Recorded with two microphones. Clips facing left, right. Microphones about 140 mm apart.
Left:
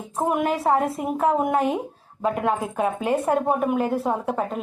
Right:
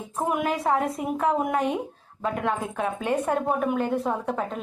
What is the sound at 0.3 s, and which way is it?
A woman's voice, centre (ahead or behind).